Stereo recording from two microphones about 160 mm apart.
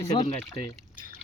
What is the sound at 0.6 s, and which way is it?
Speech, 20° left (ahead or behind).